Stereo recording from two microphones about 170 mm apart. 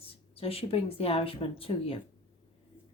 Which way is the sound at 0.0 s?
35° left (ahead or behind).